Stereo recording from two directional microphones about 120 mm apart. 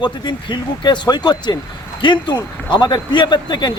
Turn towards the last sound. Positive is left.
turn(degrees=35)  # may be behind; listen again after turning